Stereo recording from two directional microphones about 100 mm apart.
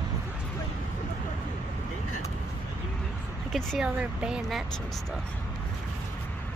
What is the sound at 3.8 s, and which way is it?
Speech, 10° right (ahead or behind).